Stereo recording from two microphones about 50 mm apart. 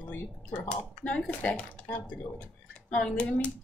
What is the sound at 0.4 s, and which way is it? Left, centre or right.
Speech, left.